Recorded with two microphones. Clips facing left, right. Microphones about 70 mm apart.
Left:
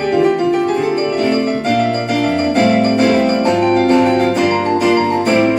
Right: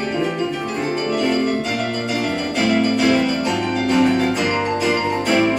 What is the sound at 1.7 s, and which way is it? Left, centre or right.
Keyboard, left.